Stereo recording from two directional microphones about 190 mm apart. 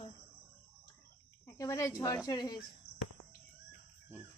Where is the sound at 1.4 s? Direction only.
15° left (ahead or behind).